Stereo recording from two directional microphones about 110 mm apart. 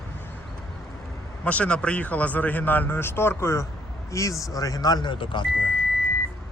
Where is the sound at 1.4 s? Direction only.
10° left (ahead or behind); by 5.4 s 45° left (ahead or behind).